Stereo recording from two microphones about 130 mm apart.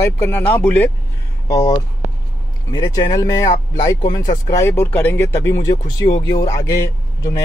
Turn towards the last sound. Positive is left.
turn(degrees=25)  # may be behind; listen again after turning